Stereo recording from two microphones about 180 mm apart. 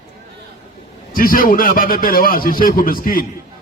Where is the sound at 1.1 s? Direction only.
50° left (ahead or behind).